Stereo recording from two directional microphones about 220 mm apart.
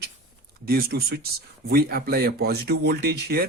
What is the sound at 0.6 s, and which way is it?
Speech, 45° right (ahead or behind).